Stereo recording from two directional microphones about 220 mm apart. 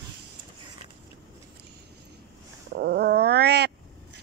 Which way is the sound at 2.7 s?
50° right (ahead or behind).